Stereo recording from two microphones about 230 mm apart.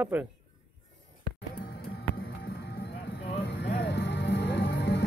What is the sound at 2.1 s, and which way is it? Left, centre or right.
Music, left.